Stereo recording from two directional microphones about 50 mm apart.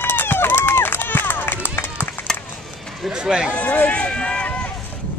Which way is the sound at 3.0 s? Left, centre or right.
Centre.